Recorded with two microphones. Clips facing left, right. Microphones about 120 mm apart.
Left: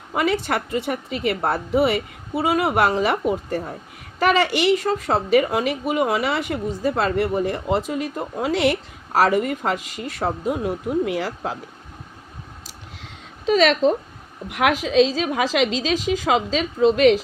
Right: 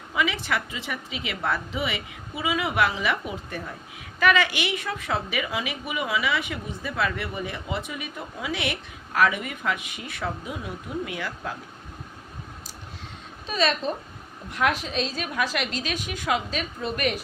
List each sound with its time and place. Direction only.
0.1 s a woman's voice: 65° left (ahead or behind)
13.4 s a woman's voice: 90° left